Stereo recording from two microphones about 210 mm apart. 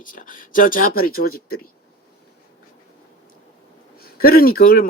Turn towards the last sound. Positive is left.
turn(degrees=45)  # may be behind; listen again after turning